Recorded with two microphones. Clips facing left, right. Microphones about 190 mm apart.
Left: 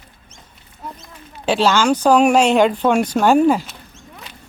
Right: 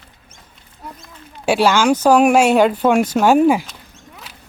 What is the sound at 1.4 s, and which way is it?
A woman's voice, 10° right (ahead or behind).